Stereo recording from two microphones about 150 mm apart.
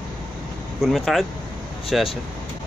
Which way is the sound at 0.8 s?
Centre (ahead or behind).